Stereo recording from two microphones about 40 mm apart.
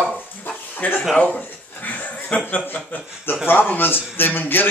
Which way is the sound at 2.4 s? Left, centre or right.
Left.